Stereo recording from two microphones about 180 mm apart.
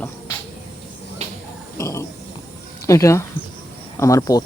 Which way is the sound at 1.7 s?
15° left (ahead or behind).